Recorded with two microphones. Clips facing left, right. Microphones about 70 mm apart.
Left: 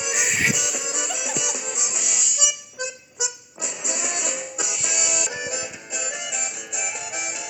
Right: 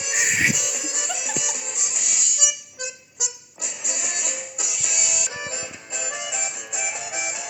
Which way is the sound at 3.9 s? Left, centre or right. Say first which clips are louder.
Left 3 dB; left.